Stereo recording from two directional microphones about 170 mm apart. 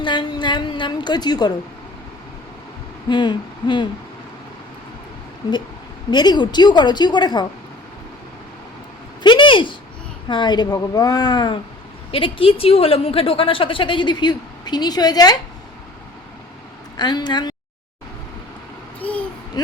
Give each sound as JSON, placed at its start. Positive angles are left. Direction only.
{"t": 0.0, "sound": "a woman's voice", "side_deg": 25}
{"t": 3.1, "sound": "a woman's voice", "side_deg": 25}
{"t": 6.1, "sound": "a woman's voice", "side_deg": 25}
{"t": 9.2, "sound": "a sound", "side_deg": 30}
{"t": 10.2, "sound": "a woman's voice", "side_deg": 25}
{"t": 17.0, "sound": "a woman's voice", "side_deg": 25}
{"t": 19.6, "sound": "a woman's voice", "side_deg": 25}